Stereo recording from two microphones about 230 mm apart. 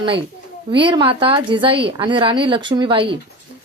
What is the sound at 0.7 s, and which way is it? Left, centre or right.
A woman's voice, right.